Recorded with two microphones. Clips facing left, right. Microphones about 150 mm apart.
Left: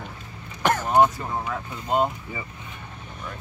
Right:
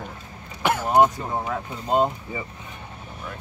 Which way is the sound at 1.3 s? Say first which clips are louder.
Right 2 dB; 30° right (ahead or behind).